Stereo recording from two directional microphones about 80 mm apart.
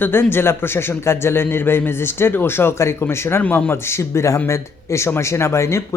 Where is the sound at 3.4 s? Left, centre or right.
Left.